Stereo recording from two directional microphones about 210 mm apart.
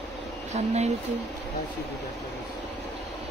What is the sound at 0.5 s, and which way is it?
Speech, 35° right (ahead or behind).